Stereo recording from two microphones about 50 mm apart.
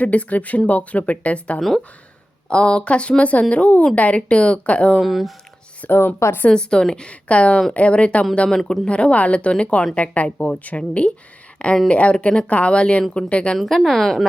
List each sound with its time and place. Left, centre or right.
0.0 s speech: left
4.9 s a woman's voice: centre
5.8 s speech: left
6.5 s a woman's voice: centre
8.4 s speech: centre
13.6 s a woman's voice: centre